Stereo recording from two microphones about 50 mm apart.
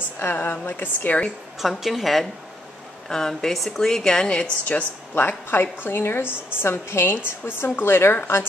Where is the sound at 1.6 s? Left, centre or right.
Centre; by 4.8 s left.